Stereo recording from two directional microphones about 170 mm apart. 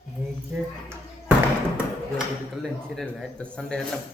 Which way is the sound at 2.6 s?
Centre (ahead or behind).